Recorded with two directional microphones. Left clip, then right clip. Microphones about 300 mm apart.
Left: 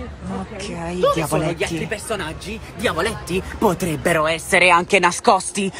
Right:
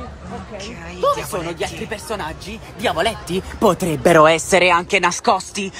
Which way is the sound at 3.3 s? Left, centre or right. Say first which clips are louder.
Right 2 dB; right.